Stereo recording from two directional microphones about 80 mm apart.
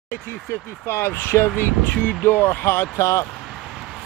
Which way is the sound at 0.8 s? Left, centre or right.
Left.